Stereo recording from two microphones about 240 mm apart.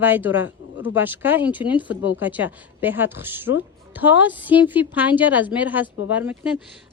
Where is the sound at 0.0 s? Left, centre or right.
Centre.